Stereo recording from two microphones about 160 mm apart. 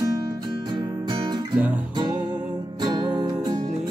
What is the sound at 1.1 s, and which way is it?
Music, 25° right (ahead or behind).